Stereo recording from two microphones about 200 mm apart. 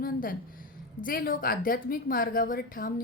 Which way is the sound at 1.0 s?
45° left (ahead or behind).